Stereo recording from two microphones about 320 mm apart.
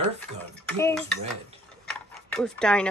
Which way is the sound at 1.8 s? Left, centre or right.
Centre.